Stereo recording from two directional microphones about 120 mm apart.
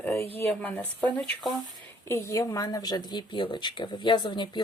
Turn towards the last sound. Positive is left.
turn(degrees=40)  # may be behind; listen again after turning